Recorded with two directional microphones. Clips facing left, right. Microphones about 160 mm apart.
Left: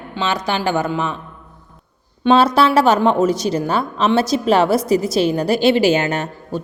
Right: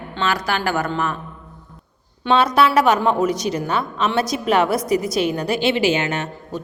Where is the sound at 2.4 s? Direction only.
30° left (ahead or behind).